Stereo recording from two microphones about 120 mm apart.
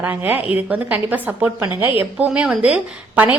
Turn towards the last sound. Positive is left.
turn(degrees=-15)  # may be behind; listen again after turning